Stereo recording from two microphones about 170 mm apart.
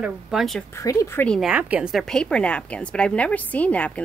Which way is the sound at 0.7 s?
20° left (ahead or behind).